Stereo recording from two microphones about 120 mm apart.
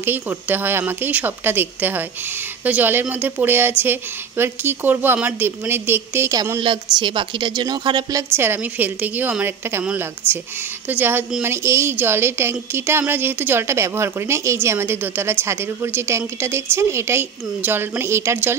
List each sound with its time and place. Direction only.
0.0 s a woman's voice: 15° right (ahead or behind)
6.6 s a woman's voice: 45° right (ahead or behind)
8.2 s speech: 20° right (ahead or behind)
10.9 s a woman's voice: 15° right (ahead or behind)